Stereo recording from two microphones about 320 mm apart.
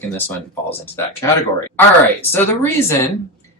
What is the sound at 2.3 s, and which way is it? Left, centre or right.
Speech, centre.